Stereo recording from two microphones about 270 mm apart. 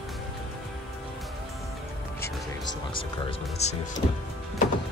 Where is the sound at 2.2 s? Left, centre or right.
Centre.